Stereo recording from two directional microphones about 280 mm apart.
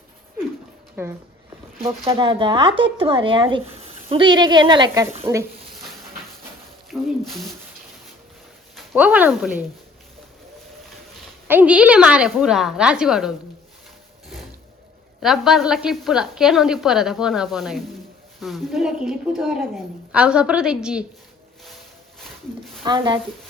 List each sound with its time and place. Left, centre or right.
1.0 s speech: centre
6.9 s a sound: centre
8.7 s speech: centre
11.4 s a woman's voice: centre
15.2 s a woman's voice: centre
22.2 s a sound: centre
22.8 s speech: centre